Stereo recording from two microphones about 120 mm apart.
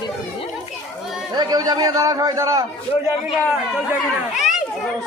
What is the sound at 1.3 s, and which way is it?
A man's voice, 35° right (ahead or behind).